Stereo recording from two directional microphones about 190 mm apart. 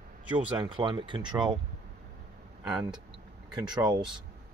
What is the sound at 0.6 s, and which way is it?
Speech, 25° right (ahead or behind).